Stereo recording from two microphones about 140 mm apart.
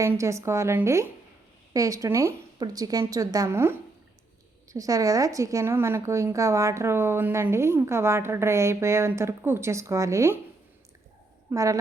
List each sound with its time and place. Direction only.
0.2 s a woman's voice: 20° right (ahead or behind)
11.5 s a woman's voice: 25° right (ahead or behind)